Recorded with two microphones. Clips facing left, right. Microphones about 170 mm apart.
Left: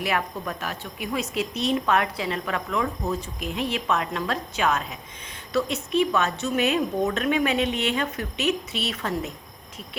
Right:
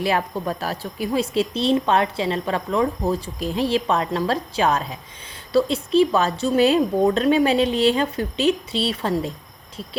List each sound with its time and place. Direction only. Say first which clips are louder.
0.0 s speech: right 5 dB; 30° right (ahead or behind)